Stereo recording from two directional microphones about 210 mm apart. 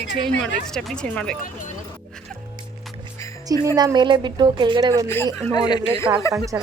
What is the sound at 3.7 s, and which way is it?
Speech, 20° right (ahead or behind).